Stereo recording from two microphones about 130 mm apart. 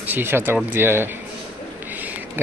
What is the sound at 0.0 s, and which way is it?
Speech, 15° right (ahead or behind).